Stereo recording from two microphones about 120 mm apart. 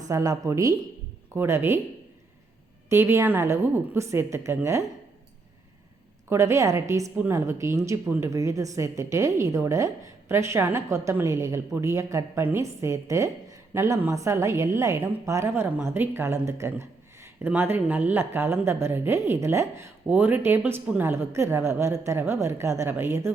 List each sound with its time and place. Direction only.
0.0 s a woman's voice: 30° right (ahead or behind)
2.9 s a woman's voice: 20° right (ahead or behind)
6.2 s a woman's voice: 25° right (ahead or behind)